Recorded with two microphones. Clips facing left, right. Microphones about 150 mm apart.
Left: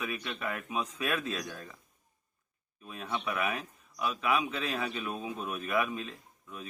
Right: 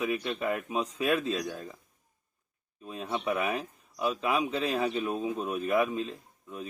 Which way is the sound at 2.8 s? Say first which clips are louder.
Right 4 dB; 30° right (ahead or behind).